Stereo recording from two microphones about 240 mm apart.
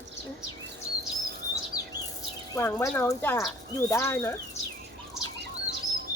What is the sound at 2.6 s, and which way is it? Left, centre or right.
Speech, centre.